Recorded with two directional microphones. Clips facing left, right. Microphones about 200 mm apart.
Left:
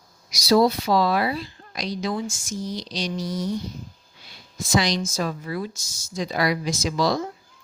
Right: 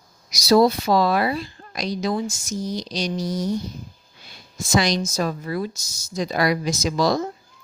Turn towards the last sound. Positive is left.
turn(degrees=-45)  # may be behind; listen again after turning